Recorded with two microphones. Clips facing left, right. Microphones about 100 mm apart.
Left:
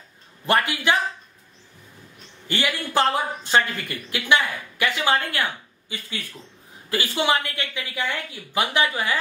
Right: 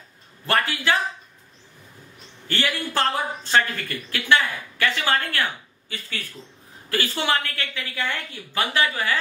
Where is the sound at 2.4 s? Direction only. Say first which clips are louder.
Even; 15° left (ahead or behind).